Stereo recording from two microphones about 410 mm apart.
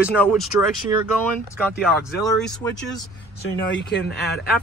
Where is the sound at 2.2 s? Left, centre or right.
Centre.